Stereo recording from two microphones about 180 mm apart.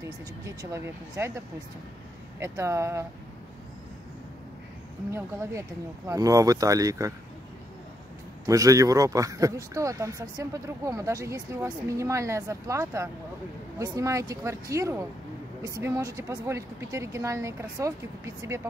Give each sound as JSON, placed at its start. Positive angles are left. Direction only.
{"t": 0.5, "sound": "speech", "side_deg": -15}
{"t": 2.4, "sound": "speech", "side_deg": -15}
{"t": 5.1, "sound": "speech", "side_deg": -15}
{"t": 8.5, "sound": "speech", "side_deg": -20}